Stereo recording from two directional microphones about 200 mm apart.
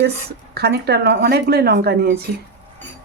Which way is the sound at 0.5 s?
55° right (ahead or behind).